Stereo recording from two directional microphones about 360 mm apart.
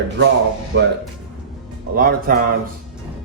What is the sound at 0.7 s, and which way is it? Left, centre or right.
Speech, right.